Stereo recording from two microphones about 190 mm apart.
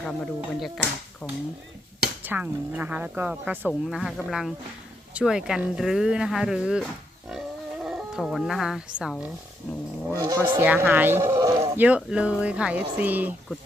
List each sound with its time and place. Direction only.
0.0 s speech: 5° left (ahead or behind)
2.2 s speech: 10° right (ahead or behind)
7.3 s livestock: 5° right (ahead or behind)
10.2 s speech: 25° right (ahead or behind)
10.6 s speech: 10° right (ahead or behind)